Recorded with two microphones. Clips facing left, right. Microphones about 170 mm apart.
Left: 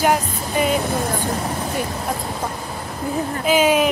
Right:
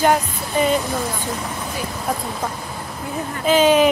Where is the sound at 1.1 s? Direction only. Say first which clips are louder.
Left 4 dB; 45° left (ahead or behind).